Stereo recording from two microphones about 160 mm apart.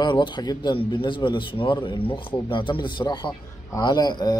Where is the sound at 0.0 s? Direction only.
30° left (ahead or behind).